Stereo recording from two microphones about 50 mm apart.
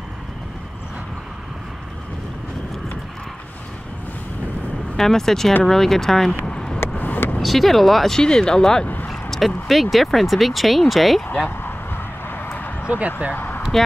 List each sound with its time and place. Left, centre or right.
4.9 s speech: centre
6.4 s vehicle: centre
7.0 s vehicle: left
7.3 s speech: centre
8.2 s speech: centre
8.8 s a sound: left
9.1 s a sound: centre
9.7 s speech: centre
12.8 s speech: right
13.3 s speech: left